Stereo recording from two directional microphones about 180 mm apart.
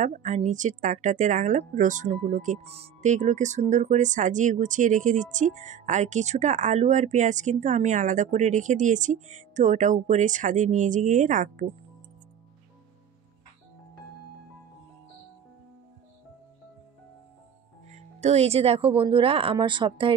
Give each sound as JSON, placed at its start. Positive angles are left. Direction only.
{"t": 0.0, "sound": "speech", "side_deg": -40}
{"t": 17.8, "sound": "speech", "side_deg": -40}